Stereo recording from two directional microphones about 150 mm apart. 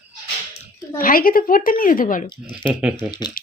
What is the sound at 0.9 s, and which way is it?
Speech, 70° left (ahead or behind).